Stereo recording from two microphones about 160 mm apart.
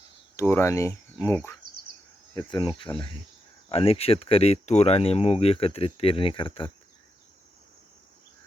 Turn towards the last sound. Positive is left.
turn(degrees=30)  # may be behind; listen again after turning